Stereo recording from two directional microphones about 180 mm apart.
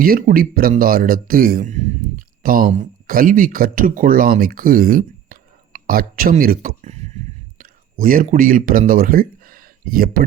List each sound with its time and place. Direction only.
0.0 s speech: 55° right (ahead or behind)
6.8 s a sound: 35° right (ahead or behind)
7.6 s speech: 50° right (ahead or behind)